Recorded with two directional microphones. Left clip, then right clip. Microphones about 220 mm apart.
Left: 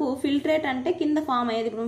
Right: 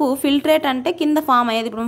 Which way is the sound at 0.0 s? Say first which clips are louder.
Right 8 dB; 35° right (ahead or behind).